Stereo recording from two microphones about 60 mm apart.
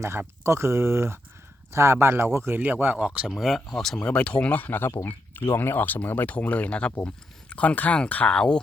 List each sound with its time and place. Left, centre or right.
0.0 s speech: right
2.6 s speech: right
3.2 s speech: centre
4.0 s speech: left
5.0 s a sound: left
5.5 s speech: left; by 8.5 s centre